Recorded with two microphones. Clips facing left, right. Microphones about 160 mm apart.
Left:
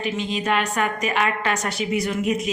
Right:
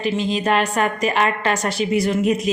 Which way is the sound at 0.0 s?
35° right (ahead or behind).